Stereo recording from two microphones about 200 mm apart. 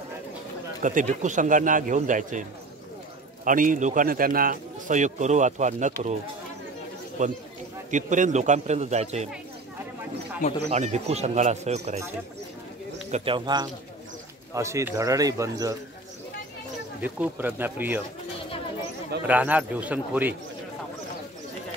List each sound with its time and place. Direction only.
0.8 s a man's voice: 40° right (ahead or behind)
3.4 s a man's voice: 40° right (ahead or behind)
7.2 s a man's voice: 40° right (ahead or behind)
10.7 s a man's voice: 35° right (ahead or behind)
13.1 s a man's voice: 25° right (ahead or behind)
17.0 s a man's voice: 10° right (ahead or behind)
19.2 s a man's voice: 10° right (ahead or behind)